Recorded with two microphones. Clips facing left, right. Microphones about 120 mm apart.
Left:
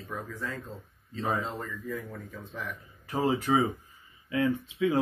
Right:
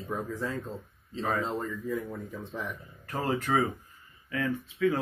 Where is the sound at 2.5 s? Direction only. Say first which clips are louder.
Even; 25° right (ahead or behind).